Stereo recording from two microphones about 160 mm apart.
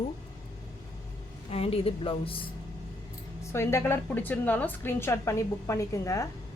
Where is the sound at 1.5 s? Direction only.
40° left (ahead or behind).